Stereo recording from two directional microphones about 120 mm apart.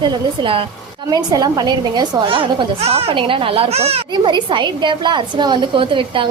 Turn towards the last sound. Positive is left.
turn(degrees=-45)  # may be behind; listen again after turning